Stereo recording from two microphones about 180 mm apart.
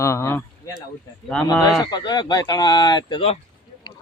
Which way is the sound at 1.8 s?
25° left (ahead or behind).